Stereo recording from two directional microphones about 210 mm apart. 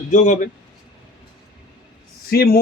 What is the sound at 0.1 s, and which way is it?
Speech, 35° left (ahead or behind).